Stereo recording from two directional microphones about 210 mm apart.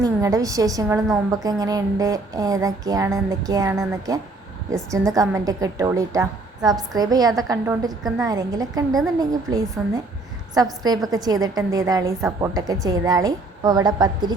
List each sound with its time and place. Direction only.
0.0 s a woman's voice: 15° right (ahead or behind)